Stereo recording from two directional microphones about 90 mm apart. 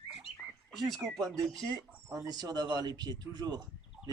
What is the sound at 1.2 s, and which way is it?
Speech, 40° right (ahead or behind).